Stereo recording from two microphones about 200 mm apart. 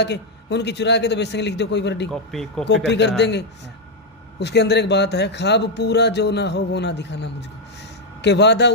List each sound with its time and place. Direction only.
0.0 s speech: 60° left (ahead or behind)
2.0 s speech: 5° left (ahead or behind)
2.9 s speech: 60° left (ahead or behind)